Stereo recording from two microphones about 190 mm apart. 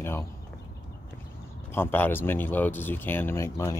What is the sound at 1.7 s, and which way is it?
Speech, 10° left (ahead or behind).